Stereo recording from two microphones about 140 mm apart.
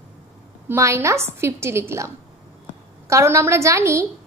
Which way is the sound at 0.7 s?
20° right (ahead or behind).